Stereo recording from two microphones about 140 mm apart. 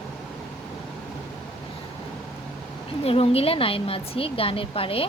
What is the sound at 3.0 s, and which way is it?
Speech, 45° left (ahead or behind).